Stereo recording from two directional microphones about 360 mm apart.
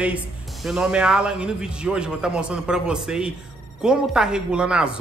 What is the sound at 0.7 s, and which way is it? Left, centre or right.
A woman's voice, centre.